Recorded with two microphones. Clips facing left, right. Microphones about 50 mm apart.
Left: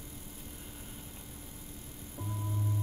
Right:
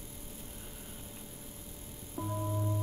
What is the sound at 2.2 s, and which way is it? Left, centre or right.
Music, right.